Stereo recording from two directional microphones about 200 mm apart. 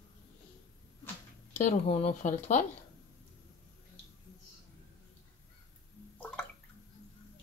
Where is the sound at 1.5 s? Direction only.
35° left (ahead or behind).